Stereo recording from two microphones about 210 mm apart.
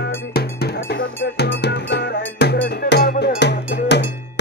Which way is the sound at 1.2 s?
55° left (ahead or behind).